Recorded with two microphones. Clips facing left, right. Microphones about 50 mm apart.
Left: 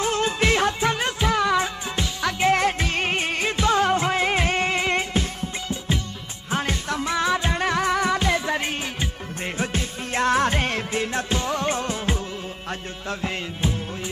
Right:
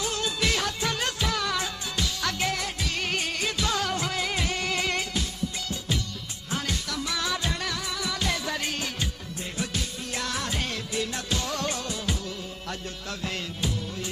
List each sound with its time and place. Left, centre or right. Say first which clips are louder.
0.0 s music: left 6 dB; left
6.5 s music: left 6 dB; left
13.2 s music: left 3 dB; left